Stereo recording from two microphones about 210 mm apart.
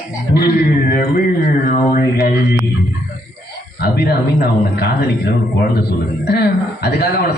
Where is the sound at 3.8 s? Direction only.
50° left (ahead or behind).